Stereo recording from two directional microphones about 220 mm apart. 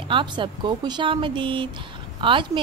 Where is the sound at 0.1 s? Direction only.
20° right (ahead or behind).